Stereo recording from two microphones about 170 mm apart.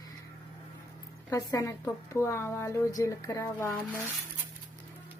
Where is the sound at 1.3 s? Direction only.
20° left (ahead or behind).